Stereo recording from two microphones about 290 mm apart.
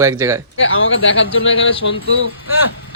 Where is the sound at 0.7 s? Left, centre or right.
Left.